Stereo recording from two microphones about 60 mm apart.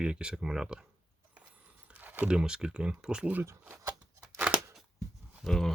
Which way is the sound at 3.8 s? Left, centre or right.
Right.